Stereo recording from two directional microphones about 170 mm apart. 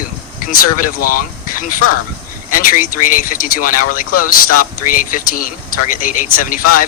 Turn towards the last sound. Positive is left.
turn(degrees=55)  # may be behind; listen again after turning